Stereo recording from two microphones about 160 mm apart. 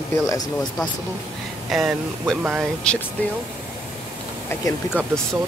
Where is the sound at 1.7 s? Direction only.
Centre (ahead or behind).